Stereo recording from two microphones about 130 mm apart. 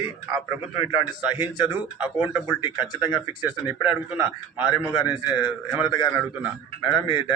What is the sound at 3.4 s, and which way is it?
A man's voice, 15° right (ahead or behind).